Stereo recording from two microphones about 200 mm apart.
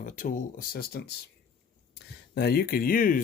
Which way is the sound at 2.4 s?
50° left (ahead or behind).